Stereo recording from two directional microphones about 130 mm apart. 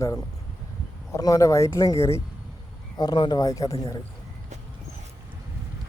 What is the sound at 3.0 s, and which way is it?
Speech, 35° left (ahead or behind).